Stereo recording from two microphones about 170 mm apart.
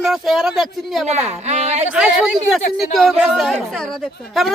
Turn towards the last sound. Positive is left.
turn(degrees=0)  # may be behind; listen again after turning